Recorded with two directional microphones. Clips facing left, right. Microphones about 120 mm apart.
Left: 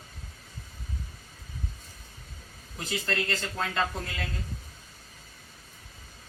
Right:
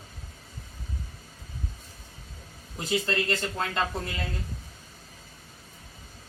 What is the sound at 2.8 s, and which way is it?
Speech, 20° right (ahead or behind).